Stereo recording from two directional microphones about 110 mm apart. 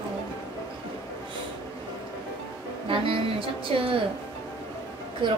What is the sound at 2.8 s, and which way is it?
A woman's voice, 55° right (ahead or behind).